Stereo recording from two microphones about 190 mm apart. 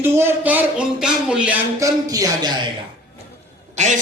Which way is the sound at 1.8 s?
20° right (ahead or behind).